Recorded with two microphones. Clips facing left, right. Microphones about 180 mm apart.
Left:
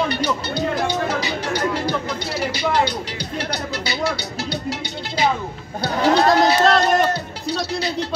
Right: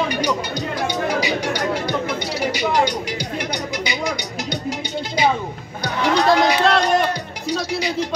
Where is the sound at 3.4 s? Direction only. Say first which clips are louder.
Left 3 dB; 15° right (ahead or behind).